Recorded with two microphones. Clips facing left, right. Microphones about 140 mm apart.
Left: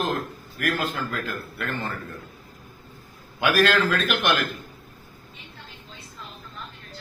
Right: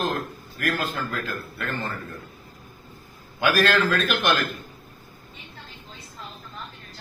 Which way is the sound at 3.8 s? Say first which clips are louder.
Even; 10° left (ahead or behind).